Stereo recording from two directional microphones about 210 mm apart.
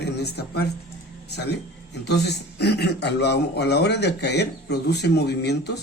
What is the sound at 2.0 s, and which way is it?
A man's voice, 50° left (ahead or behind).